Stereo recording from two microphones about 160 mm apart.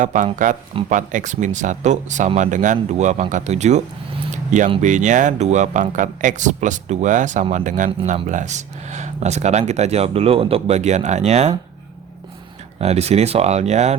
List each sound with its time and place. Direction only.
0.0 s speech: 50° right (ahead or behind)
12.8 s speech: 40° right (ahead or behind)